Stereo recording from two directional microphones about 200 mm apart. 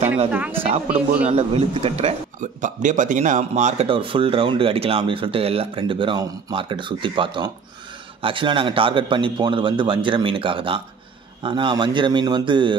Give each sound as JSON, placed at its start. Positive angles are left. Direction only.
{"t": 0.3, "sound": "speech", "side_deg": -10}
{"t": 0.6, "sound": "speech", "side_deg": -30}